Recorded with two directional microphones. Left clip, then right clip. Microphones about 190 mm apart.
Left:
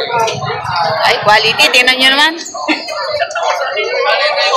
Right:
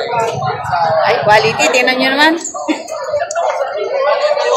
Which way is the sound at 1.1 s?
5° right (ahead or behind).